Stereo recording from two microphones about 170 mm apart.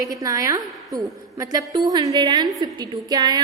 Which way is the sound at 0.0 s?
20° right (ahead or behind).